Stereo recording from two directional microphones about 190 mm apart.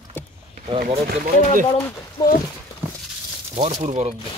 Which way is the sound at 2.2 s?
15° left (ahead or behind).